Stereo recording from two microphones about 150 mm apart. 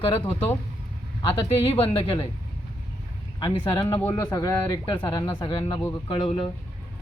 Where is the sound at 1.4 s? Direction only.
35° left (ahead or behind).